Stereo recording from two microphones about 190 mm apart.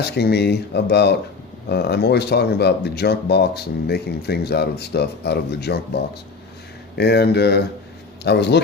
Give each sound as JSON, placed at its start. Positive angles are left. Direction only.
{"t": 0.0, "sound": "speech", "side_deg": 60}